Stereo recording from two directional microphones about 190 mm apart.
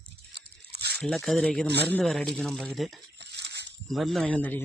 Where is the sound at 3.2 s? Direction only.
65° right (ahead or behind).